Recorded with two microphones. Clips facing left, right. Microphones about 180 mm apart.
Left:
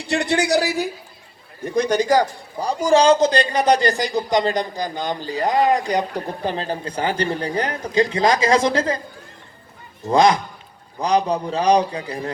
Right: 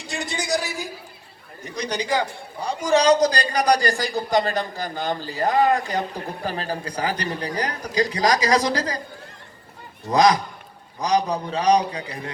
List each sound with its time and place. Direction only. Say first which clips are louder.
0.1 s a sound: left 7 dB; 65° left (ahead or behind)
1.6 s a man's voice: left 9 dB; 50° left (ahead or behind); by 9.0 s 25° left (ahead or behind)
10.1 s a man's voice: left 2 dB; 25° left (ahead or behind)